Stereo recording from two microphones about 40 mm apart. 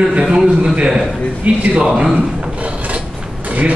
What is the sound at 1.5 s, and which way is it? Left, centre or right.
Speech, right.